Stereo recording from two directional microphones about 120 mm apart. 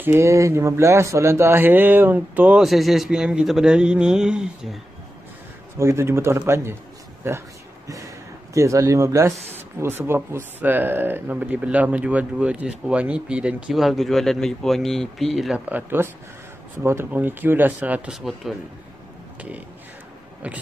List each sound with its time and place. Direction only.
0.0 s speech: 25° right (ahead or behind)
2.6 s a man's voice: centre (ahead or behind)
5.8 s speech: 20° right (ahead or behind)
7.2 s a sound: 25° right (ahead or behind)
8.5 s speech: 25° right (ahead or behind); by 15.6 s centre (ahead or behind)
15.7 s speech: 20° right (ahead or behind); by 18.5 s centre (ahead or behind)
20.4 s speech: 10° right (ahead or behind)